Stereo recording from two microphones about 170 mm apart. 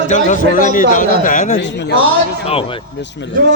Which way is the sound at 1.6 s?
85° left.